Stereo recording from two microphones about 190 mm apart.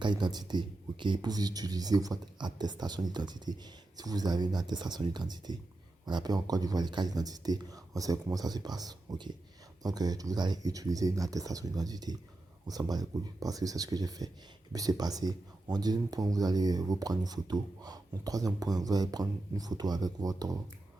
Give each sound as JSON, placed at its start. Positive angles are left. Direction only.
{"t": 0.0, "sound": "speech", "side_deg": -25}